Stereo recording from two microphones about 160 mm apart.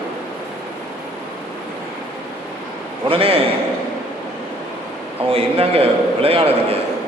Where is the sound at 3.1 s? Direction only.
35° right (ahead or behind).